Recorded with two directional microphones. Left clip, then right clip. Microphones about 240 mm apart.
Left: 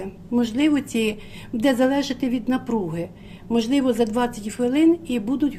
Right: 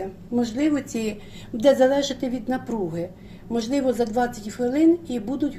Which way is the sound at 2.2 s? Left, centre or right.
Left.